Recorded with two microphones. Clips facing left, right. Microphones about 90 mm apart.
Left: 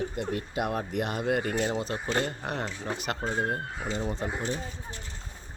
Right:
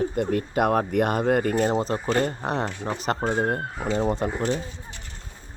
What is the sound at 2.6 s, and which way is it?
Speech, 60° right (ahead or behind).